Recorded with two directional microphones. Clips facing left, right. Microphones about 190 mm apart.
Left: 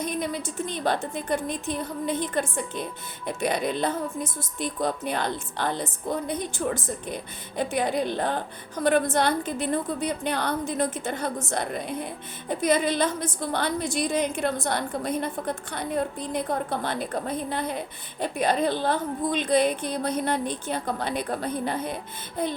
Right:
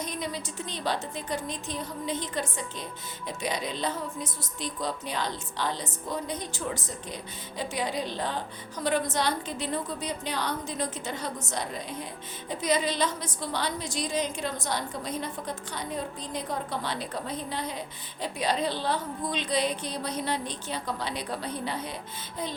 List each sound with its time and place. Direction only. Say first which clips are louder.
0.0 s a woman's voice: left 5 dB; 55° left (ahead or behind)